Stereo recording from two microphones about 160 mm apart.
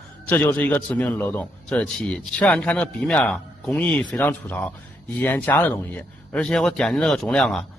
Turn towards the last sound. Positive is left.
turn(degrees=5)  # may be behind; listen again after turning